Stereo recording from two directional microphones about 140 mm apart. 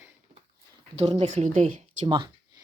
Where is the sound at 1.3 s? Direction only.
55° right (ahead or behind).